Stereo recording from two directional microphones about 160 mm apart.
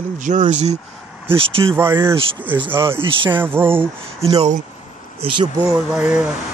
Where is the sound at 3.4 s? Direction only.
15° right (ahead or behind).